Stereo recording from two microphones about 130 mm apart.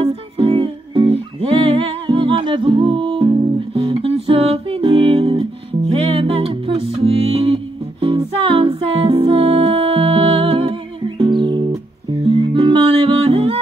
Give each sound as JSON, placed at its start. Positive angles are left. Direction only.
{"t": 0.0, "sound": "music", "side_deg": -45}